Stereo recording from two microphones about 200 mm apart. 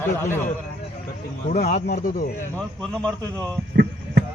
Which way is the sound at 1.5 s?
40° left (ahead or behind).